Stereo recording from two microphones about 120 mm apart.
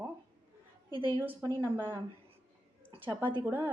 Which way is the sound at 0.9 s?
45° right (ahead or behind).